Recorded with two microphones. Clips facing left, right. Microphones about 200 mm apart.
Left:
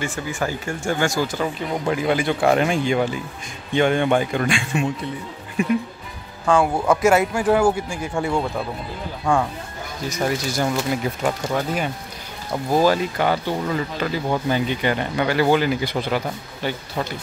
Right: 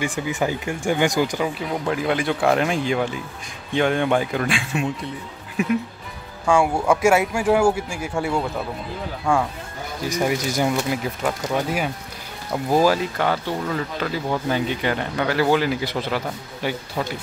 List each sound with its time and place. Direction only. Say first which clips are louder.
0.0 s speech: right 2 dB; 15° right (ahead or behind)
1.7 s speech: left 4 dB; centre (ahead or behind)
10.0 s speech: right 1 dB; 15° right (ahead or behind)
10.9 s speech: left 1 dB; centre (ahead or behind)